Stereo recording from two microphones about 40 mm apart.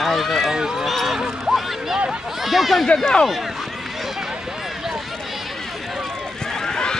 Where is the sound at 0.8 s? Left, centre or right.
Centre.